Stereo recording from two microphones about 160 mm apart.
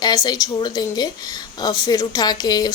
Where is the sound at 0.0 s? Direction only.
25° left (ahead or behind).